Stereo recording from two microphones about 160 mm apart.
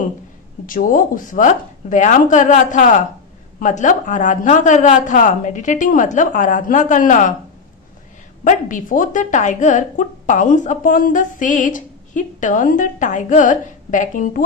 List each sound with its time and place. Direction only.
0.7 s speech: 60° left (ahead or behind)
8.4 s speech: 55° left (ahead or behind)